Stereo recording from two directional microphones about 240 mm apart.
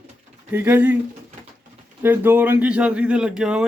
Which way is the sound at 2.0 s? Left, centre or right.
Centre.